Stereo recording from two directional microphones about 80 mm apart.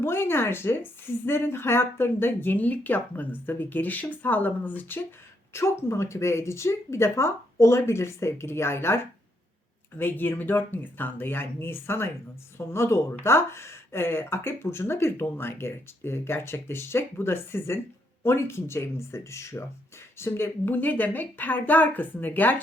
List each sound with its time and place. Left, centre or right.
0.0 s a woman's voice: left
5.5 s speech: left
10.0 s a woman's voice: left